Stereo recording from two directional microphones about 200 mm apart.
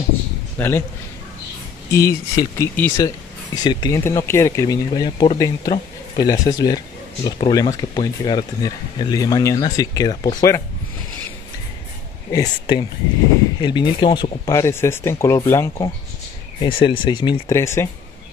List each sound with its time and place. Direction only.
0.6 s speech: 10° left (ahead or behind)
1.9 s speech: 15° left (ahead or behind)
12.3 s speech: 20° left (ahead or behind)
16.6 s speech: 25° left (ahead or behind)